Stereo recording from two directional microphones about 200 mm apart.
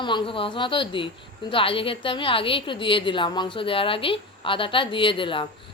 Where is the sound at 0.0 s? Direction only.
25° left (ahead or behind).